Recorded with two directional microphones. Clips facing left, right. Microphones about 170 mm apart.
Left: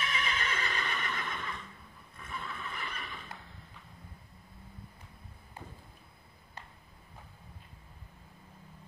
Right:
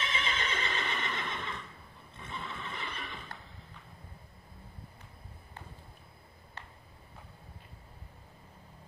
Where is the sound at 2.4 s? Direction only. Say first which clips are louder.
Right 1 dB; 25° right (ahead or behind).